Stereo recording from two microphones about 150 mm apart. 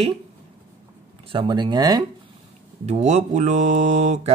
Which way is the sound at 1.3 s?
30° right (ahead or behind).